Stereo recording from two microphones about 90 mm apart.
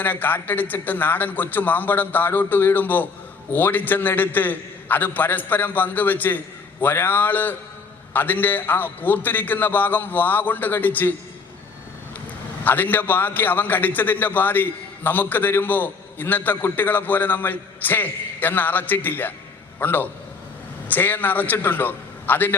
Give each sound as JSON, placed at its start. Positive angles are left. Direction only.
{"t": 0.0, "sound": "a man's voice", "side_deg": 20}
{"t": 12.6, "sound": "a man's voice", "side_deg": 20}